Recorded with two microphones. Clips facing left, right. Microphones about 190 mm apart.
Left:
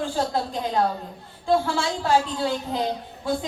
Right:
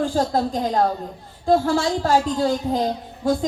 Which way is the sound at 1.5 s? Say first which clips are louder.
Right 4 dB; 40° right (ahead or behind).